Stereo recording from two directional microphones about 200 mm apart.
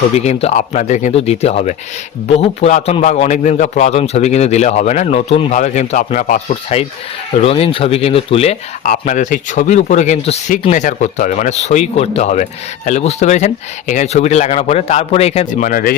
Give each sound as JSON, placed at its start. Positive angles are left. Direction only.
{"t": 0.2, "sound": "speech", "side_deg": 30}
{"t": 6.5, "sound": "speech", "side_deg": 30}